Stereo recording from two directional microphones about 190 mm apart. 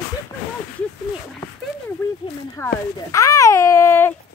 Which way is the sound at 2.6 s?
15° left (ahead or behind).